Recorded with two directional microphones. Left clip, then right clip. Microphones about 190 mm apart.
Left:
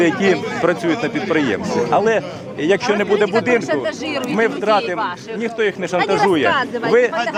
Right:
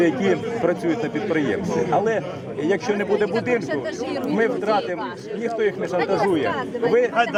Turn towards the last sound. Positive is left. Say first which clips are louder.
# left 4 dB
turn(degrees=0)  # may be behind; listen again after turning